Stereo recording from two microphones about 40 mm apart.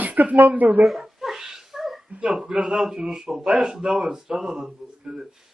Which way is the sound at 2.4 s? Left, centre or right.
Right.